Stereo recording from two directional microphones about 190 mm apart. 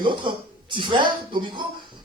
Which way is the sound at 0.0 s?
25° right (ahead or behind).